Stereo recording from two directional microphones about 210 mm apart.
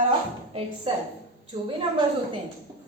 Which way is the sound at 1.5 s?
25° right (ahead or behind).